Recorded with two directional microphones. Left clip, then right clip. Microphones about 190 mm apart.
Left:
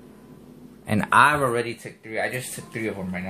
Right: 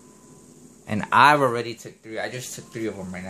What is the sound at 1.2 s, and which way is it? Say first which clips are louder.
Speech: right 3 dB; 50° right (ahead or behind).